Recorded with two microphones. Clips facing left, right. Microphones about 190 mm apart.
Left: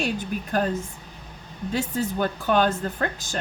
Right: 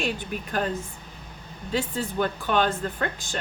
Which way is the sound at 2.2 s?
40° left (ahead or behind).